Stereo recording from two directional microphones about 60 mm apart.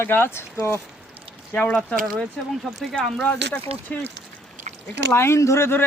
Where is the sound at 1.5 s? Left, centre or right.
Left.